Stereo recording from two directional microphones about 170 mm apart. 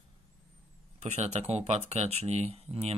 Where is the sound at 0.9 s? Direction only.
40° right (ahead or behind).